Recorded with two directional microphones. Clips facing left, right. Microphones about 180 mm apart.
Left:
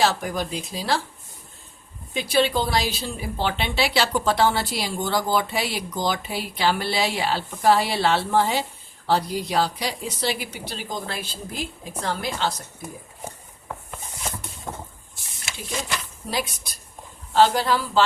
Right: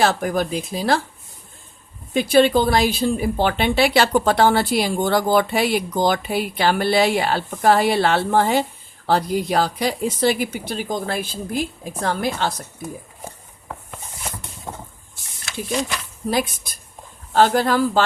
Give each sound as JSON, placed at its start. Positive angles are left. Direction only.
{"t": 0.0, "sound": "a woman's voice", "side_deg": -55}
{"t": 2.1, "sound": "a woman's voice", "side_deg": -50}
{"t": 14.7, "sound": "vehicle", "side_deg": -10}
{"t": 16.3, "sound": "a woman's voice", "side_deg": -50}